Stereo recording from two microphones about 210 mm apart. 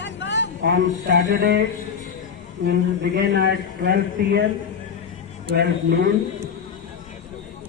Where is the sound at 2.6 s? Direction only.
55° right (ahead or behind).